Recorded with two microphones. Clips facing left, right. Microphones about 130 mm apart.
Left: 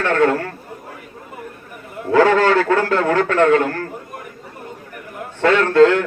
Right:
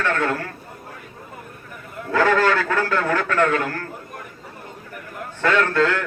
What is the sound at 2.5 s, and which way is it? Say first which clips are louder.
Speech: left 5 dB; 45° left (ahead or behind).